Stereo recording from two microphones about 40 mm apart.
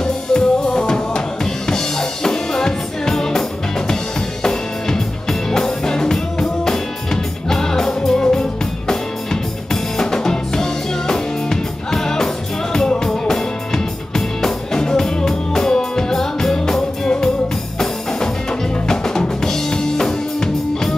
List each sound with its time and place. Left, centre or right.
0.0 s music: centre
18.9 s drum: centre